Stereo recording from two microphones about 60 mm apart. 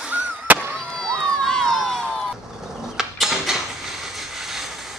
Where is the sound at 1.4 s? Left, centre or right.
Centre.